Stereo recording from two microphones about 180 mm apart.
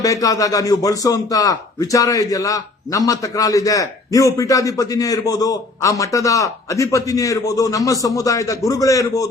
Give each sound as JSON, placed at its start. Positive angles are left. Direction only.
{"t": 0.0, "sound": "a man's voice", "side_deg": 20}